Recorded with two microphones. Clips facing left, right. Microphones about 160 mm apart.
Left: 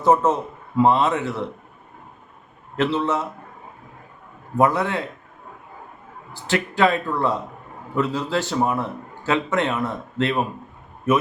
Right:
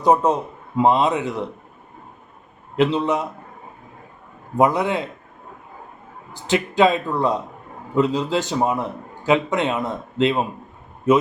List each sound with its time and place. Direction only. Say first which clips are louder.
0.0 s a man's voice: right 1 dB; 15° right (ahead or behind)
2.7 s a man's voice: right 2 dB; 15° right (ahead or behind)
4.5 s a man's voice: right 1 dB; 15° right (ahead or behind)
6.3 s a man's voice: right 4 dB; 20° right (ahead or behind)